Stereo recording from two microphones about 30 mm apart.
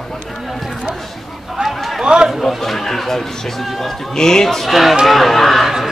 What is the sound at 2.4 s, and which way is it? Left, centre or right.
Speech, centre.